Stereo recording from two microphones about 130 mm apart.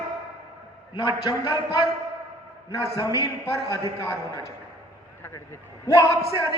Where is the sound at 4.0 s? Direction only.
25° left (ahead or behind).